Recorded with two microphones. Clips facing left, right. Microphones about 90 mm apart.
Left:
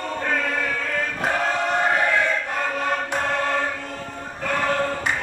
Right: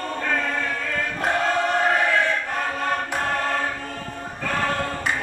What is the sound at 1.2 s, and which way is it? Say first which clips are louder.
Choir: right 2 dB; 5° left (ahead or behind).